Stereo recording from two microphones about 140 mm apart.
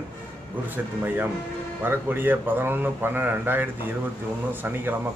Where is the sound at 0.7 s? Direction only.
15° right (ahead or behind).